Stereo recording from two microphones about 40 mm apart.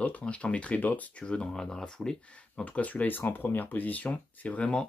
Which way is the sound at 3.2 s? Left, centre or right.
Left.